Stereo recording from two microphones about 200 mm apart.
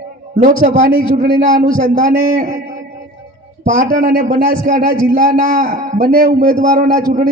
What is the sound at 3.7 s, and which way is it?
A man's voice, 40° right (ahead or behind).